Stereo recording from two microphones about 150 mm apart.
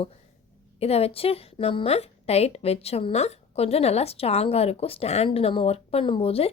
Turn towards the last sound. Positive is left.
turn(degrees=40)  # may be behind; listen again after turning